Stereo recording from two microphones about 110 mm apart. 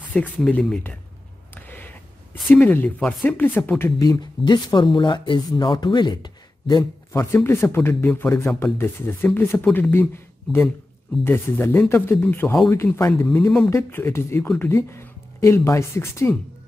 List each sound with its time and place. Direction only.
0.0 s speech: 15° left (ahead or behind)
1.5 s a sound: 15° left (ahead or behind)
2.5 s speech: 15° left (ahead or behind)
4.0 s speech: 40° left (ahead or behind)
6.8 s speech: 25° left (ahead or behind)